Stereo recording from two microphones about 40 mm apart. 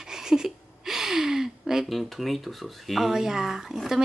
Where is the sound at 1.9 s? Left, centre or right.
Centre.